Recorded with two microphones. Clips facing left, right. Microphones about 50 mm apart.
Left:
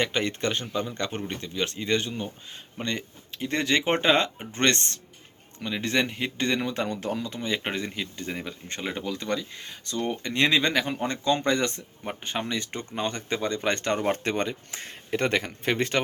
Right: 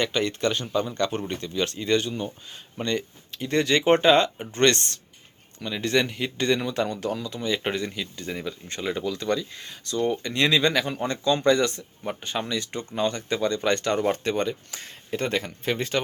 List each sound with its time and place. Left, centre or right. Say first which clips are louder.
0.0 s speech: right 2 dB; left
15.2 s speech: left 1 dB; left